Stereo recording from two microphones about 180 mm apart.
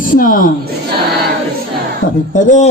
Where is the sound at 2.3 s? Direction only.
45° left (ahead or behind).